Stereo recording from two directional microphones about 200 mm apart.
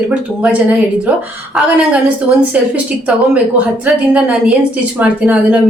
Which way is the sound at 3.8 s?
5° right (ahead or behind).